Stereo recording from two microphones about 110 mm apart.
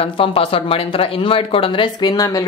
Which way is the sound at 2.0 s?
30° left (ahead or behind).